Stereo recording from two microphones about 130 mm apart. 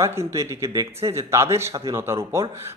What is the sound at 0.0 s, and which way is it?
A man's voice, 20° right (ahead or behind).